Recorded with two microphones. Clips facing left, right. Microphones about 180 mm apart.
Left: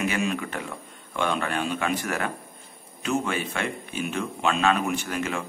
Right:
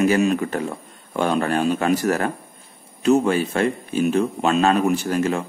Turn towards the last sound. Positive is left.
turn(degrees=-35)  # may be behind; listen again after turning